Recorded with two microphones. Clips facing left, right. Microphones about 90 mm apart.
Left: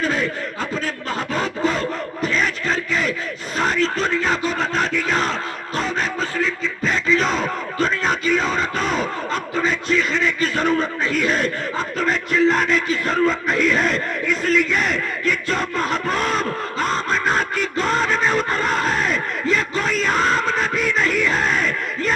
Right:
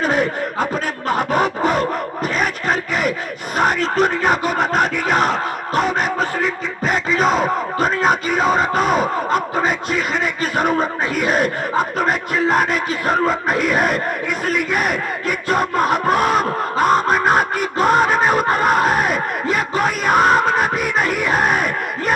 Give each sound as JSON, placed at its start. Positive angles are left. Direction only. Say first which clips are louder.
{"t": 0.0, "sound": "a sound", "louder": "right 4 dB", "side_deg": -20}
{"t": 2.2, "sound": "a sound", "louder": "even", "side_deg": -55}
{"t": 3.6, "sound": "music", "louder": "right 4 dB", "side_deg": -60}
{"t": 6.1, "sound": "a sound", "louder": "right 3 dB", "side_deg": -55}
{"t": 10.2, "sound": "speech", "louder": "right 1 dB", "side_deg": -10}
{"t": 11.8, "sound": "speech", "louder": "right 3 dB", "side_deg": -55}
{"t": 16.7, "sound": "music", "louder": "right 8 dB", "side_deg": -55}
{"t": 17.7, "sound": "battle cry", "louder": "right 6 dB", "side_deg": -55}
{"t": 19.8, "sound": "music", "louder": "right 8 dB", "side_deg": -55}